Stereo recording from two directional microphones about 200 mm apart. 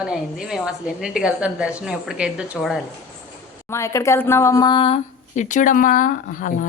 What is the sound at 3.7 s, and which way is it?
A woman's voice, 15° left (ahead or behind).